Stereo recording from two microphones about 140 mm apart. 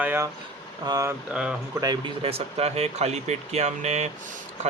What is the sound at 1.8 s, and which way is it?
Speech, 30° right (ahead or behind).